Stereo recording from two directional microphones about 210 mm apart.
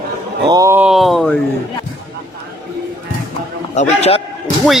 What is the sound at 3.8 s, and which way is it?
Speech, 30° left (ahead or behind).